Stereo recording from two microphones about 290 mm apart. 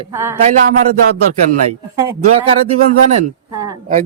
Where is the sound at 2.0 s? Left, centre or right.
Centre.